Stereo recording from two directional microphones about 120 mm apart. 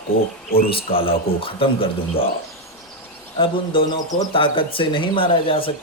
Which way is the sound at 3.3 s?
45° left (ahead or behind).